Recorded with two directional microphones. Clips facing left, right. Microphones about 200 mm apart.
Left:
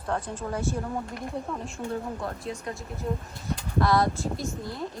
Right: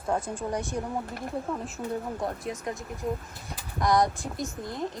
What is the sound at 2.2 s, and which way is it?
Speech, 20° right (ahead or behind).